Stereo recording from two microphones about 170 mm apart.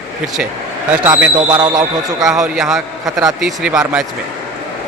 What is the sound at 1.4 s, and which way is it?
Speech, 25° right (ahead or behind).